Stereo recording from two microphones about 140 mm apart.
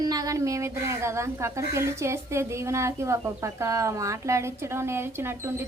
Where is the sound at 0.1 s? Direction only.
25° right (ahead or behind).